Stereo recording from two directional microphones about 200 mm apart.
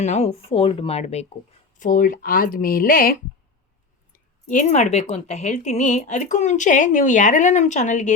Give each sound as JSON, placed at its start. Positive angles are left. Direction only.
{"t": 0.0, "sound": "speech", "side_deg": 35}
{"t": 1.8, "sound": "speech", "side_deg": 45}